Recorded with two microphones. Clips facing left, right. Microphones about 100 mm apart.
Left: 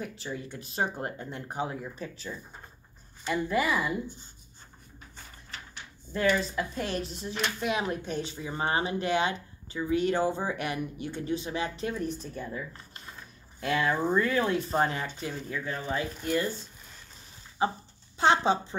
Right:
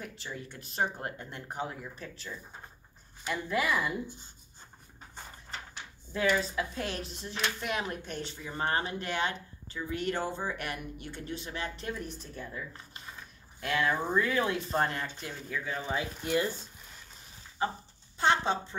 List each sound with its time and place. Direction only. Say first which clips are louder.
0.0 s speech: left 5 dB; 5° left (ahead or behind)
6.1 s speech: left 2 dB; 5° right (ahead or behind)
15.8 s speech: left 2 dB; 15° right (ahead or behind)
18.2 s a woman's voice: left 4 dB; 20° left (ahead or behind)